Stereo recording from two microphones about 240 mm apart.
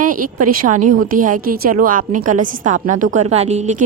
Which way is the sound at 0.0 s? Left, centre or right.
Right.